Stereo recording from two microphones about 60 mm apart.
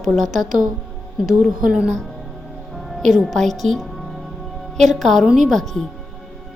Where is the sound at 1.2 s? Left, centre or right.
Centre.